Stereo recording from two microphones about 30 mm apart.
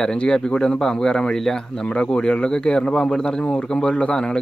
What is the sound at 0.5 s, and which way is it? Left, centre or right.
Speech, left.